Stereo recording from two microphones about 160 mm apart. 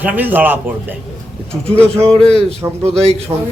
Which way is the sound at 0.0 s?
10° right (ahead or behind).